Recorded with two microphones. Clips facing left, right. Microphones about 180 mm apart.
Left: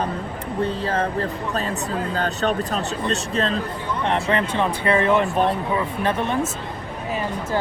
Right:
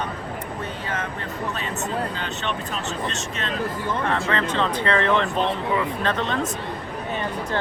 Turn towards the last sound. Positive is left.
turn(degrees=10)  # may be behind; listen again after turning